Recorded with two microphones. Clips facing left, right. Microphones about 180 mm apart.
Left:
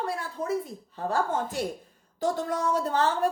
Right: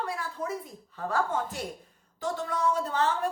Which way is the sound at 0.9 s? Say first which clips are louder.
Left 2 dB; 30° left (ahead or behind).